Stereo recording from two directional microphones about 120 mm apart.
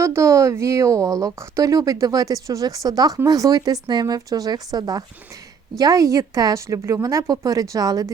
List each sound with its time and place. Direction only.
0.0 s speech: 25° right (ahead or behind)